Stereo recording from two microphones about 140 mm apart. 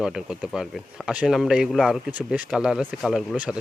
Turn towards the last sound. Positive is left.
turn(degrees=-10)  # may be behind; listen again after turning